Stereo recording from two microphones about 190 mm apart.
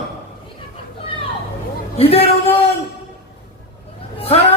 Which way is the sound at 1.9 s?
30° left (ahead or behind).